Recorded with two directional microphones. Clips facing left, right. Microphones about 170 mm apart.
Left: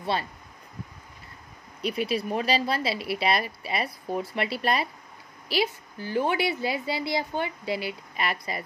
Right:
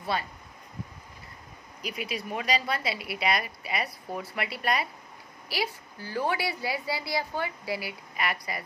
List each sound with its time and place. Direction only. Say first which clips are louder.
1.8 s a woman's voice: left 7 dB; 30° left (ahead or behind)